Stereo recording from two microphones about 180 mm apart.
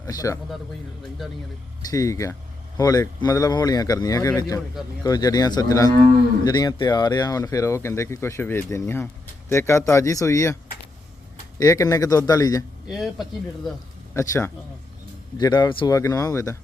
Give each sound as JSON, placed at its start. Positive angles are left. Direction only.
{"t": 0.0, "sound": "speech", "side_deg": 20}
{"t": 1.9, "sound": "speech", "side_deg": 20}
{"t": 12.9, "sound": "speech", "side_deg": 0}
{"t": 14.1, "sound": "speech", "side_deg": 15}